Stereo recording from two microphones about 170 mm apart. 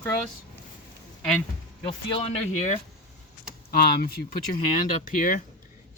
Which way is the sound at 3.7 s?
65° left (ahead or behind).